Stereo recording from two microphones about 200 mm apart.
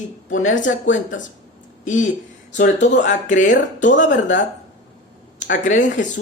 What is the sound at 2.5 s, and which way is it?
Speech, 40° left (ahead or behind).